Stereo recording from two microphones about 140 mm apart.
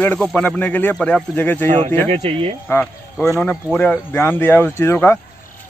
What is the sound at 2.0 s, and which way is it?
Speech, 45° right (ahead or behind).